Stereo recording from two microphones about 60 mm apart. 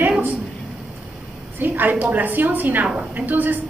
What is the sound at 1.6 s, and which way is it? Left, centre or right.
A woman's voice, right.